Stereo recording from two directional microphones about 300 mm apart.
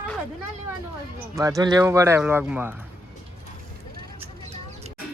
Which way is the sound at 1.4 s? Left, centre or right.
Centre.